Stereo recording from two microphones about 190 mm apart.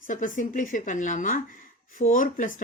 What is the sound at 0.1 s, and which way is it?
Speech, 40° left (ahead or behind).